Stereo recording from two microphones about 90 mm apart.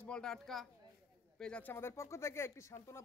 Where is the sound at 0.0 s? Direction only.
10° left (ahead or behind).